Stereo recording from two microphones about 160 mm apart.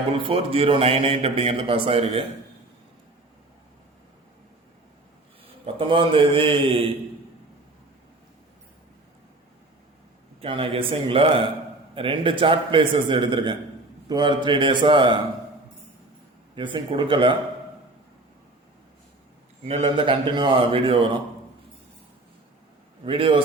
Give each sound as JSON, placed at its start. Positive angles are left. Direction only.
{"t": 0.1, "sound": "a man's voice", "side_deg": -35}
{"t": 5.6, "sound": "a man's voice", "side_deg": -35}
{"t": 10.4, "sound": "a man's voice", "side_deg": -35}
{"t": 16.6, "sound": "a man's voice", "side_deg": -30}
{"t": 19.6, "sound": "a man's voice", "side_deg": -40}
{"t": 23.0, "sound": "a man's voice", "side_deg": -35}